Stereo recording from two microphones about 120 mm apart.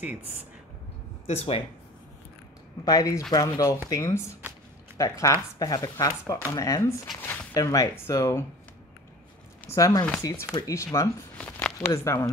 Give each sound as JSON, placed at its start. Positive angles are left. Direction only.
{"t": 1.2, "sound": "speech", "side_deg": 55}
{"t": 2.8, "sound": "speech", "side_deg": 30}
{"t": 9.7, "sound": "speech", "side_deg": 30}
{"t": 11.3, "sound": "a sound", "side_deg": 15}
{"t": 11.9, "sound": "speech", "side_deg": 25}